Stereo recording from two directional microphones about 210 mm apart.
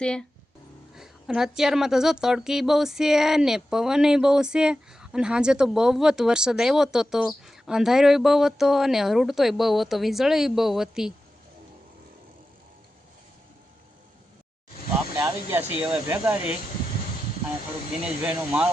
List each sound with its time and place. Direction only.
0.0 s a woman's voice: 5° left (ahead or behind)
15.2 s speech: 10° right (ahead or behind)
18.2 s speech: 5° right (ahead or behind)